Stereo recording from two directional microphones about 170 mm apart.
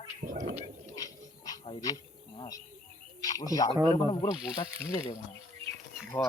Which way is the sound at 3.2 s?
20° left (ahead or behind).